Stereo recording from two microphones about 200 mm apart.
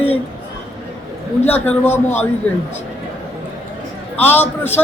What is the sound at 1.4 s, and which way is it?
Speech, 10° left (ahead or behind).